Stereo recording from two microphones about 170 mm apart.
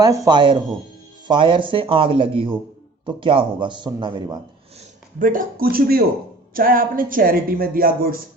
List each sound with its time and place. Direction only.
0.0 s speech: 25° right (ahead or behind)
5.2 s a woman's voice: 55° right (ahead or behind)